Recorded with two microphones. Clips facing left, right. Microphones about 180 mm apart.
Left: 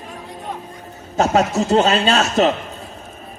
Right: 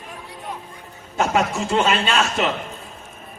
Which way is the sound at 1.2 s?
40° left (ahead or behind).